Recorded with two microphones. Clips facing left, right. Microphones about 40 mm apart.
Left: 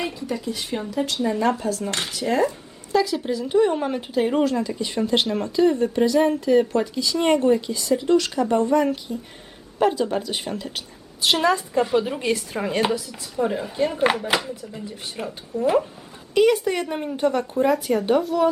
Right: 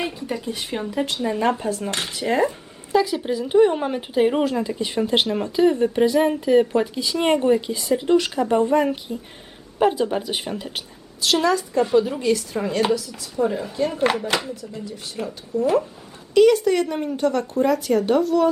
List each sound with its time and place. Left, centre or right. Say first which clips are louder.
0.7 s speech: right 1 dB; right
1.9 s speech: even; centre
2.1 s speech: right 1 dB; right
11.3 s speech: right 2 dB; left
12.5 s speech: right 2 dB; centre